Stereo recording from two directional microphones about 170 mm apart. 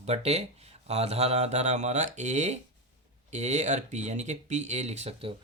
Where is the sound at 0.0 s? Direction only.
40° right (ahead or behind).